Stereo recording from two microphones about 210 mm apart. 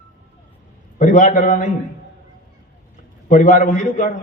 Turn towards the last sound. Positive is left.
turn(degrees=35)  # may be behind; listen again after turning